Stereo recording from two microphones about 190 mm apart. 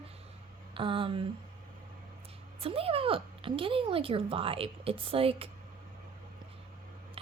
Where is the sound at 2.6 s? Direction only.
30° right (ahead or behind).